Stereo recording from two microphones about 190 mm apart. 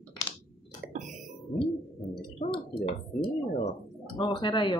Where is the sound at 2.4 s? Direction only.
35° left (ahead or behind).